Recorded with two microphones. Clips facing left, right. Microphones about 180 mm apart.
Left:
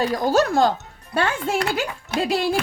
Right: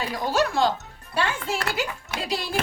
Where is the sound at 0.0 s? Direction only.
40° left (ahead or behind).